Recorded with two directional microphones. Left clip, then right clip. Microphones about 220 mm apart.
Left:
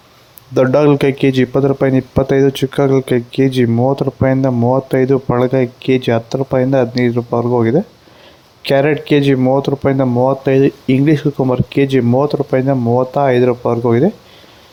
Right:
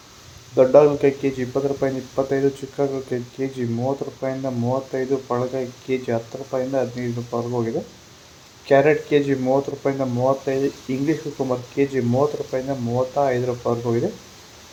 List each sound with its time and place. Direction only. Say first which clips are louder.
0.5 s speech: left 3 dB; 45° left (ahead or behind)